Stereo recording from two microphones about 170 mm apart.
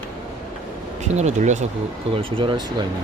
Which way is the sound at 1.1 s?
45° right (ahead or behind).